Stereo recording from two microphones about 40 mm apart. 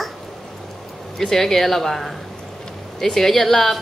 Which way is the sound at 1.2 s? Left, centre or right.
Centre.